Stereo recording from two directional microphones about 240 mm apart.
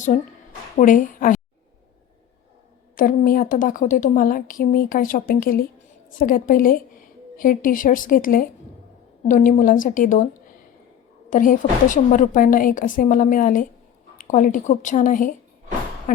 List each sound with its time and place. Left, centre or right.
0.8 s a woman's voice: left
2.9 s a woman's voice: left
11.3 s a woman's voice: left